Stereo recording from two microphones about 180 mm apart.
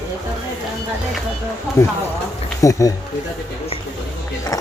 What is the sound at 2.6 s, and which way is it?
Speech, 20° left (ahead or behind).